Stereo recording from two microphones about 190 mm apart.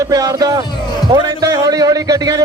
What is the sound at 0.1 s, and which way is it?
Speech, 20° right (ahead or behind).